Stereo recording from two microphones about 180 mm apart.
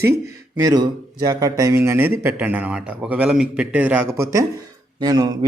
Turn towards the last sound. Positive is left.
turn(degrees=-20)  # may be behind; listen again after turning